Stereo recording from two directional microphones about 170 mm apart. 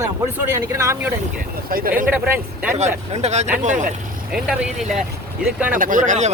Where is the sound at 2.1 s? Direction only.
10° right (ahead or behind).